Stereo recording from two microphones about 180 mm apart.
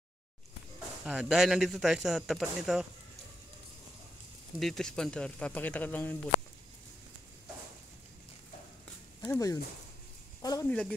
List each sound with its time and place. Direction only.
1.0 s a man's voice: 5° right (ahead or behind)
4.6 s a man's voice: centre (ahead or behind)
9.2 s speech: 15° left (ahead or behind)